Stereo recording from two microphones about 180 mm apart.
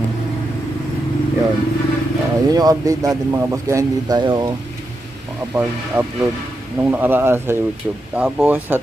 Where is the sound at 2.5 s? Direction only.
20° right (ahead or behind).